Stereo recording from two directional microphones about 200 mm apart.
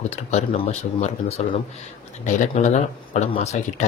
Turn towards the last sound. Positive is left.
turn(degrees=35)  # may be behind; listen again after turning